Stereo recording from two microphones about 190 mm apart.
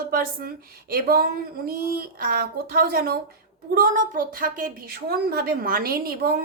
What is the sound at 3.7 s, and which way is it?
A woman's voice, 45° right (ahead or behind).